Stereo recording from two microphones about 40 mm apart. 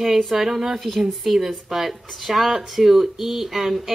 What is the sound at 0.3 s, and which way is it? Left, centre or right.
Speech, centre.